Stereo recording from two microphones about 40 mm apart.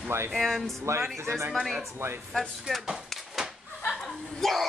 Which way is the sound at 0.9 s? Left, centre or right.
Right.